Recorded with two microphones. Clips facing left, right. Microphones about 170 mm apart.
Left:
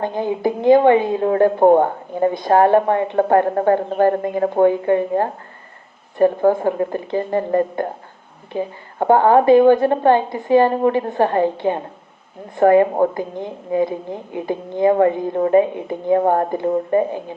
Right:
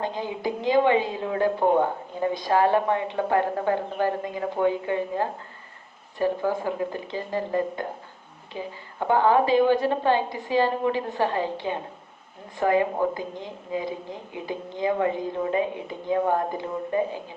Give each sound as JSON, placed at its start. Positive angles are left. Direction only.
{"t": 0.0, "sound": "a woman's voice", "side_deg": 55}